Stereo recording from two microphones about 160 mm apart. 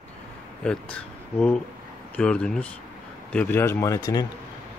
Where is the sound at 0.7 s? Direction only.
5° left (ahead or behind).